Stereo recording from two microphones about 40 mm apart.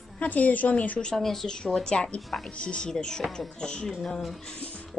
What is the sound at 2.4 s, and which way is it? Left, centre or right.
Speech, left.